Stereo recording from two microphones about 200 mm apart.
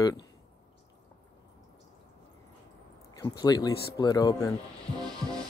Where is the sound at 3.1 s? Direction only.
20° left (ahead or behind).